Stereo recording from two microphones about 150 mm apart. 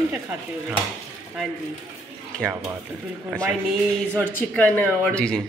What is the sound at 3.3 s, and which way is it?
Speech, centre (ahead or behind).